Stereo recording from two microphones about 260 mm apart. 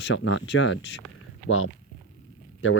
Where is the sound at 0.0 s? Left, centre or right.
Left.